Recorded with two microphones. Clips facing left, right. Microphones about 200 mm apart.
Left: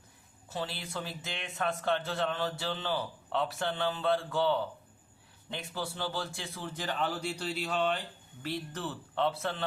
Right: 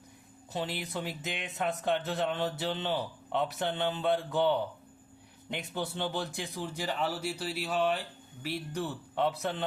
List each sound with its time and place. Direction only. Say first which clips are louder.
0.5 s a man's voice: right 2 dB; 20° right (ahead or behind)
5.7 s speech: right 2 dB; 20° right (ahead or behind)